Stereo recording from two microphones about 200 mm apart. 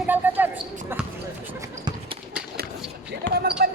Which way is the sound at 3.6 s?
50° right (ahead or behind).